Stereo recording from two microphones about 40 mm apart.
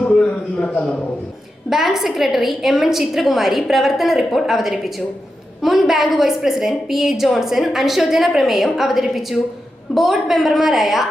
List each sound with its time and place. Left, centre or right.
0.1 s a man's voice: left
1.7 s a woman's voice: centre